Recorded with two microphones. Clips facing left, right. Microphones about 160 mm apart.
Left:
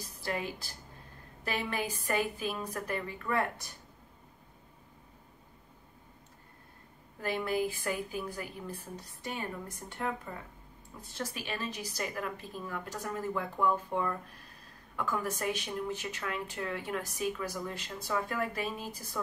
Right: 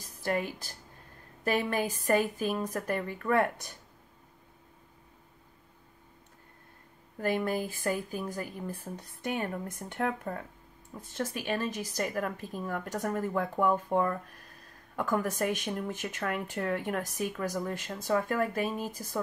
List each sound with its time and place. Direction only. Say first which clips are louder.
0.2 s speech: right 5 dB; 50° right (ahead or behind)
7.2 s speech: right 2 dB; 50° right (ahead or behind)
8.9 s speech: right 8 dB; 55° right (ahead or behind)